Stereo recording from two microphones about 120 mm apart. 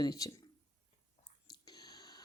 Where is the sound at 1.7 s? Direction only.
35° left (ahead or behind).